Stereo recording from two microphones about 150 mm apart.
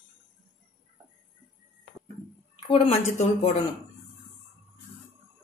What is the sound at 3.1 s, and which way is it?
Speech, 50° left (ahead or behind).